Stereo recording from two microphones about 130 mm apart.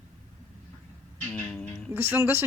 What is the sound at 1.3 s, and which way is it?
Music, 15° left (ahead or behind).